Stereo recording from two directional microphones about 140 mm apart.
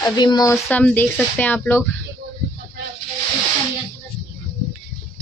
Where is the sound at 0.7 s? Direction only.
10° left (ahead or behind).